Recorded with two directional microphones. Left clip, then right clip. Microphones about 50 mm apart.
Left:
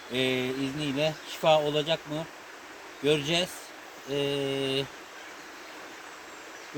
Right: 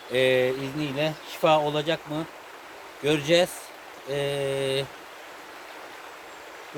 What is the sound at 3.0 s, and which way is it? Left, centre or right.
Speech, right.